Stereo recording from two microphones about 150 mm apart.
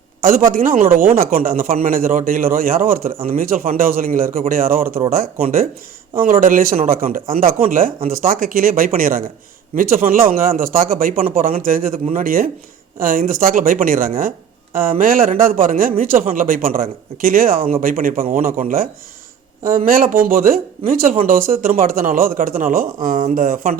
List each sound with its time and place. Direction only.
0.2 s speech: 65° right (ahead or behind)